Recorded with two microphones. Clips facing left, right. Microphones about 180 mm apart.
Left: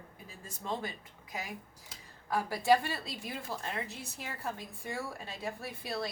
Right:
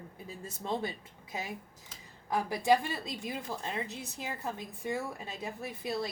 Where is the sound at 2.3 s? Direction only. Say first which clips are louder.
Even; 20° right (ahead or behind).